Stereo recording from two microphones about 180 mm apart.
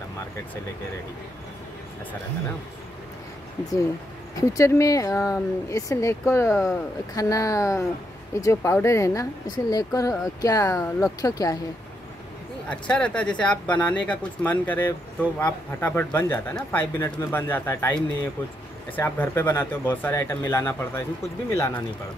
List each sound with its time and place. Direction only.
4.4 s speech: 15° left (ahead or behind)
12.6 s speech: 5° left (ahead or behind)